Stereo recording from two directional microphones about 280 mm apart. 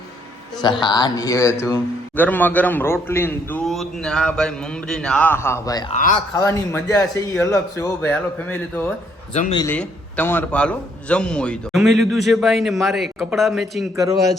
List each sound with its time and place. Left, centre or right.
0.6 s a man's voice: centre
5.9 s a man's voice: left
6.4 s a man's voice: centre
9.3 s a man's voice: left
9.6 s a man's voice: centre
13.9 s speech: centre